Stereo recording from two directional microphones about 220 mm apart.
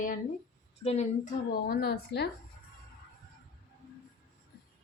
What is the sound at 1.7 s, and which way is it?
Speech, 45° left (ahead or behind).